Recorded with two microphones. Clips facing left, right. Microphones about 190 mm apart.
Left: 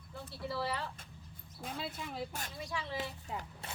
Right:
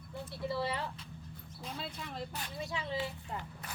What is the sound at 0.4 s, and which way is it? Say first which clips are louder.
Speech: right 2 dB; 20° right (ahead or behind).